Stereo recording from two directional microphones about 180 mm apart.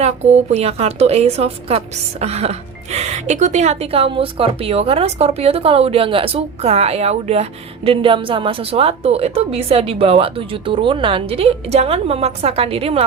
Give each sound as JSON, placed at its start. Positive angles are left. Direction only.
{"t": 0.0, "sound": "a woman's voice", "side_deg": -35}